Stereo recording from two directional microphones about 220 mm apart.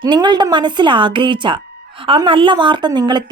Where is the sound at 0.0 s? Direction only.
20° right (ahead or behind).